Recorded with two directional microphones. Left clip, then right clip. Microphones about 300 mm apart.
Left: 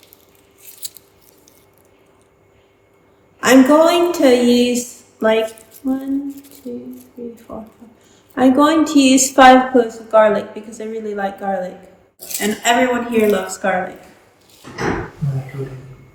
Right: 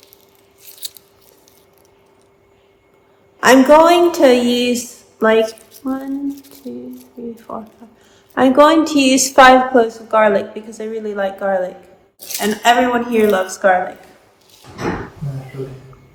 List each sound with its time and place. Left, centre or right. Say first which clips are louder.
3.4 s a woman's voice: right 2 dB; centre
5.8 s music: left 1 dB; centre
7.2 s music: right 1 dB; centre
8.4 s a woman's voice: right 3 dB; centre